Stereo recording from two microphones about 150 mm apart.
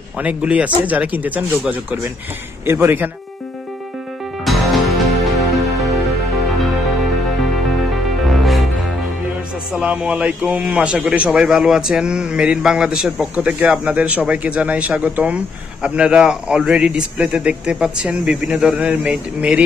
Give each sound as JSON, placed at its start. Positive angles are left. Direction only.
{"t": 0.2, "sound": "a man's voice", "side_deg": -10}
{"t": 4.5, "sound": "music", "side_deg": 0}
{"t": 8.3, "sound": "music", "side_deg": 0}
{"t": 9.8, "sound": "a man's voice", "side_deg": -5}